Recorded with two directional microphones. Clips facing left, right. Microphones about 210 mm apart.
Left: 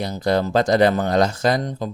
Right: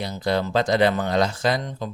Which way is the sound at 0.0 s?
45° left (ahead or behind).